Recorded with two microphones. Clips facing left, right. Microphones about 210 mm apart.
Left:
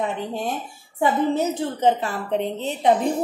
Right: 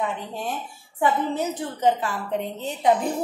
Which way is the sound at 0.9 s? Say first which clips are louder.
Left 3 dB; 25° left (ahead or behind).